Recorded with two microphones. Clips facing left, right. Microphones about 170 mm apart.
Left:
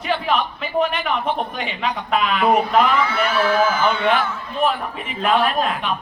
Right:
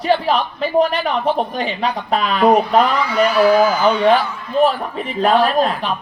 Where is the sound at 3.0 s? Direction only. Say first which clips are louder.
Right 6 dB; 15° right (ahead or behind).